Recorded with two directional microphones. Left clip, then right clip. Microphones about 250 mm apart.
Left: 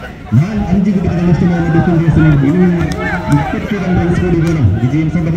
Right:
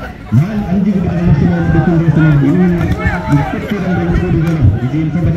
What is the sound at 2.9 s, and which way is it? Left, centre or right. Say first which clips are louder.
Run: even; centre.